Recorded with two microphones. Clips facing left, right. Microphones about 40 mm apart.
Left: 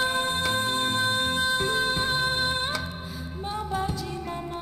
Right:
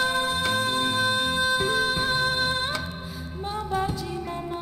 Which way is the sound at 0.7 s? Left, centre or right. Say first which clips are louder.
Right 1 dB; right.